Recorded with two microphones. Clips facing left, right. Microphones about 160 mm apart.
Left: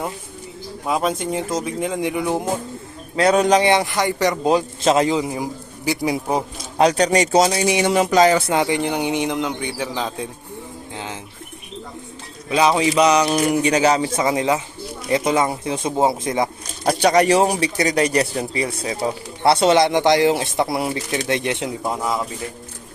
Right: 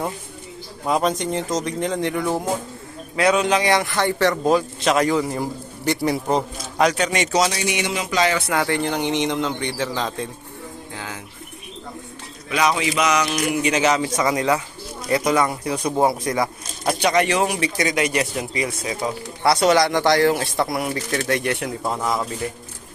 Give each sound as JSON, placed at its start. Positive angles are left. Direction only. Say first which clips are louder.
{"t": 0.9, "sound": "a man's voice", "louder": "right 1 dB", "side_deg": 5}
{"t": 3.3, "sound": "speech", "louder": "left 4 dB", "side_deg": 40}
{"t": 3.6, "sound": "speech", "louder": "left 2 dB", "side_deg": 20}
{"t": 5.3, "sound": "a man's voice", "louder": "even", "side_deg": 5}
{"t": 6.7, "sound": "speech", "louder": "left 4 dB", "side_deg": 35}
{"t": 8.4, "sound": "a man's voice", "louder": "left 2 dB", "side_deg": 15}
{"t": 10.9, "sound": "bird", "louder": "left 3 dB", "side_deg": 20}
{"t": 12.5, "sound": "speech", "louder": "left 4 dB", "side_deg": 30}
{"t": 16.8, "sound": "speech", "louder": "left 4 dB", "side_deg": 35}
{"t": 21.8, "sound": "a man's voice", "louder": "even", "side_deg": 10}